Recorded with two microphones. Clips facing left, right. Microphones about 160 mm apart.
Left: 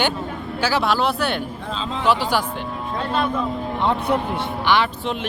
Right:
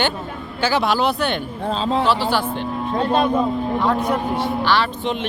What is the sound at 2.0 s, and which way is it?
Speech, 15° left (ahead or behind).